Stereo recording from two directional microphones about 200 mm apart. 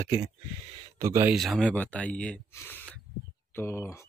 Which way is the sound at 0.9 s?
15° right (ahead or behind).